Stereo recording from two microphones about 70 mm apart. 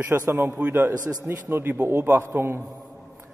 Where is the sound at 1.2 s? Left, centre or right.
Right.